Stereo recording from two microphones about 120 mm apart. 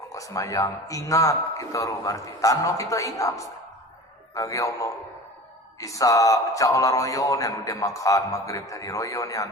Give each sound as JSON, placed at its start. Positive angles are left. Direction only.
{"t": 0.1, "sound": "speech", "side_deg": 25}